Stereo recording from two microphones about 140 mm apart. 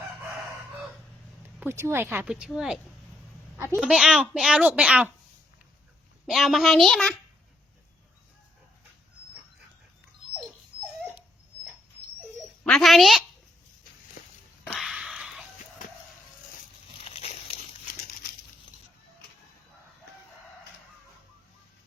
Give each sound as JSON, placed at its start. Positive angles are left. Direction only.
{"t": 1.5, "sound": "a child's voice", "side_deg": -15}
{"t": 2.2, "sound": "a child's voice", "side_deg": -5}
{"t": 3.8, "sound": "a child's voice", "side_deg": -5}
{"t": 6.2, "sound": "a child's voice", "side_deg": 0}
{"t": 12.6, "sound": "a sound", "side_deg": 5}
{"t": 14.8, "sound": "a sound", "side_deg": 0}
{"t": 17.0, "sound": "dog", "side_deg": 45}